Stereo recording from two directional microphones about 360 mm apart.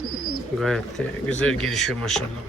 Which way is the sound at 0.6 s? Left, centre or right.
Centre.